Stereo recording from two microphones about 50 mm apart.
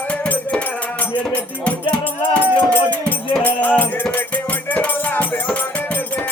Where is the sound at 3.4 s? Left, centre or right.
Left.